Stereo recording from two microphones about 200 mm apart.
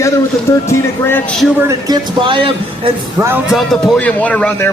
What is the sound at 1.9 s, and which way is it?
Speech, 25° right (ahead or behind).